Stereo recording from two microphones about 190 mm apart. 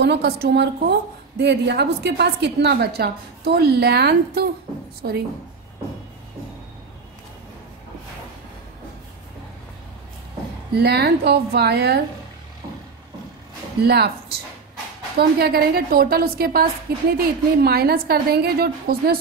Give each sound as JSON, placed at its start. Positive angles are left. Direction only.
{"t": 0.0, "sound": "a woman's voice", "side_deg": -60}
{"t": 10.8, "sound": "a woman's voice", "side_deg": -60}
{"t": 13.8, "sound": "a woman's voice", "side_deg": -55}